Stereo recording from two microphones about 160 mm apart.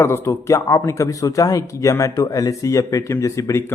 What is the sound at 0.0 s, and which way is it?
Speech, 15° left (ahead or behind).